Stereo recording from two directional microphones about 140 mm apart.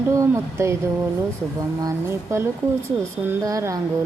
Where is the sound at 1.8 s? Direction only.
20° right (ahead or behind).